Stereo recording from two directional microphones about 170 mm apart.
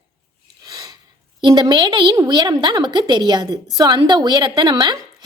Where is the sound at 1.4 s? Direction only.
25° right (ahead or behind).